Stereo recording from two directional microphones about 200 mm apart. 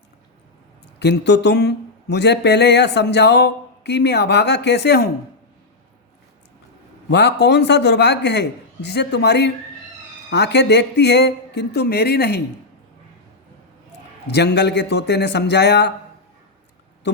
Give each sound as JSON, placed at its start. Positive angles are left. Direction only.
{"t": 0.9, "sound": "speech", "side_deg": 60}
{"t": 7.1, "sound": "speech", "side_deg": 60}
{"t": 14.3, "sound": "speech", "side_deg": 55}